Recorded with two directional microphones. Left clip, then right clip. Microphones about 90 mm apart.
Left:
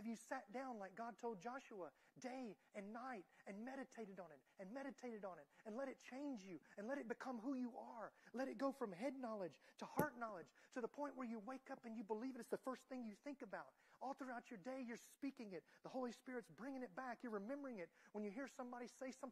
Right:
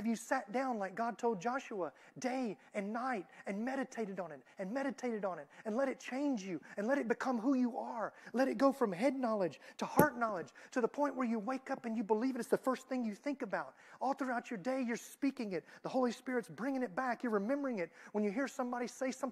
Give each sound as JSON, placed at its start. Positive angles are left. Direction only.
{"t": 0.0, "sound": "speech", "side_deg": 35}